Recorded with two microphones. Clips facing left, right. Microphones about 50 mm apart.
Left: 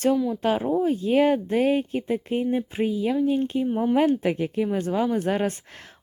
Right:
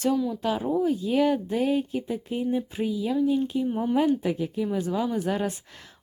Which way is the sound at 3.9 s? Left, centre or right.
Left.